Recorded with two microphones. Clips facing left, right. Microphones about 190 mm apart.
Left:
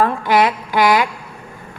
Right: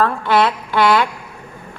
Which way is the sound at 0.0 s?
15° left (ahead or behind).